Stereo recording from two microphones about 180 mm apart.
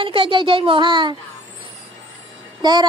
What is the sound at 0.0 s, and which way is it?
A woman's voice, 30° right (ahead or behind).